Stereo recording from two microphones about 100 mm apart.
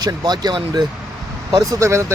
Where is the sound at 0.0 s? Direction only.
45° right (ahead or behind).